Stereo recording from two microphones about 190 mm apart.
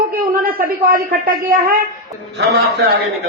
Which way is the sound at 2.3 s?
60° right (ahead or behind).